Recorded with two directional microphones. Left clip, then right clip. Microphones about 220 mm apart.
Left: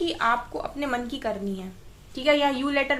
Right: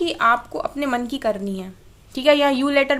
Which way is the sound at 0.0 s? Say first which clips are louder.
Right 6 dB; 50° right (ahead or behind).